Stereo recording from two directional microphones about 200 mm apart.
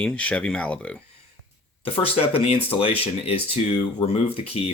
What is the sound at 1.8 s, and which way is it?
Speech, 30° left (ahead or behind).